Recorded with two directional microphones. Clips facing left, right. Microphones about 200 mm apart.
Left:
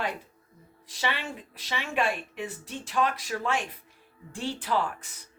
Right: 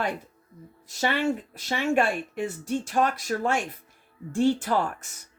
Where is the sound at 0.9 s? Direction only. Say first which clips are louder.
Right 8 dB; 45° right (ahead or behind).